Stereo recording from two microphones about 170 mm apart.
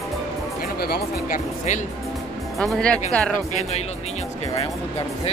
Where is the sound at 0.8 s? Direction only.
65° left (ahead or behind).